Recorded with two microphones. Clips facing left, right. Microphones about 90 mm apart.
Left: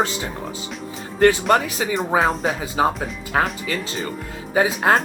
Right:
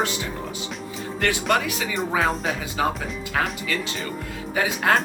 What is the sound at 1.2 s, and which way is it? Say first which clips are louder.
Speech: left 7 dB; 35° left (ahead or behind).